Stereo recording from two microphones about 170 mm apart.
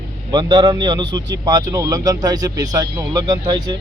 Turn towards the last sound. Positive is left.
turn(degrees=-25)  # may be behind; listen again after turning